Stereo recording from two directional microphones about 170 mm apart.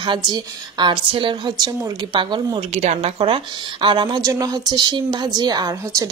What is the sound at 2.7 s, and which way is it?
A woman's voice, 40° right (ahead or behind).